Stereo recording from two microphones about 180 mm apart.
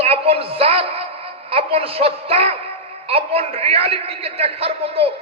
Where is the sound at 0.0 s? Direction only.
30° right (ahead or behind).